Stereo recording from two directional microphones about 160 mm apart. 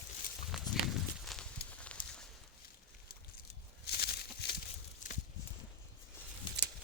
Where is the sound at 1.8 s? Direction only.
5° left (ahead or behind).